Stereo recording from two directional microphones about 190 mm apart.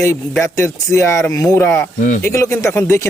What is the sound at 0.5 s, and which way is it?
Speech, 15° left (ahead or behind).